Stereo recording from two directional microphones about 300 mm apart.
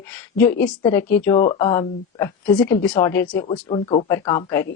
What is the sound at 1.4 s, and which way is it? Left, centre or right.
Speech, left.